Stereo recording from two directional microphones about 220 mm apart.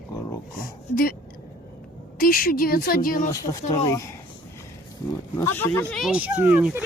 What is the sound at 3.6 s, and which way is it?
Speech, 30° left (ahead or behind).